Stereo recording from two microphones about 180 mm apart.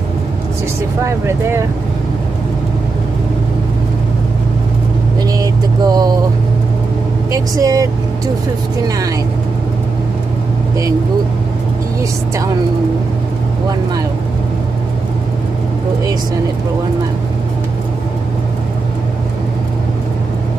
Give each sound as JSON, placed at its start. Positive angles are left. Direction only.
{"t": 1.0, "sound": "speech", "side_deg": -15}
{"t": 5.4, "sound": "speech", "side_deg": -20}
{"t": 7.5, "sound": "speech", "side_deg": -20}